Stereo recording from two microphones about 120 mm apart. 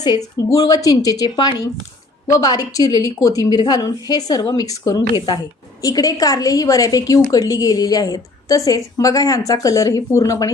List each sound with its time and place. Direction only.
0.3 s a woman's voice: 30° left (ahead or behind)